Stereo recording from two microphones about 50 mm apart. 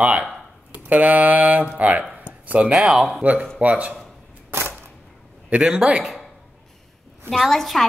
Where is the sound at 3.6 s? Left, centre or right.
Right.